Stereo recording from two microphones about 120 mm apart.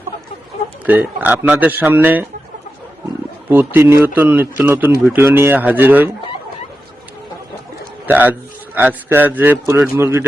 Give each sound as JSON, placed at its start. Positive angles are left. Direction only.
{"t": 0.9, "sound": "a man's voice", "side_deg": -15}
{"t": 3.5, "sound": "a man's voice", "side_deg": -15}
{"t": 8.0, "sound": "a man's voice", "side_deg": -15}